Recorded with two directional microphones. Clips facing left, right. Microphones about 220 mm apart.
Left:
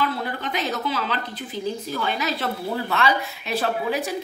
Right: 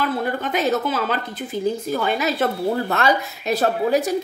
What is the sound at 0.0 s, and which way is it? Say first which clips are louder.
A woman's voice: right 4 dB; 50° right (ahead or behind).